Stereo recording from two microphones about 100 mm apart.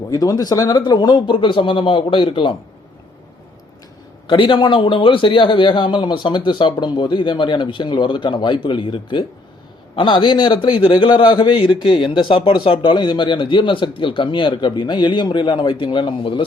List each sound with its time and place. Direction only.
0.1 s speech: 40° left (ahead or behind)
0.8 s a man's voice: 50° left (ahead or behind)
4.3 s a man's voice: 55° left (ahead or behind)